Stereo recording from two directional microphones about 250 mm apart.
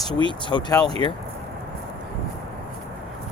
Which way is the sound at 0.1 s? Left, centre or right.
Right.